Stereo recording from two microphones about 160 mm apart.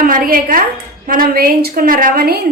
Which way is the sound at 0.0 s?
60° right (ahead or behind).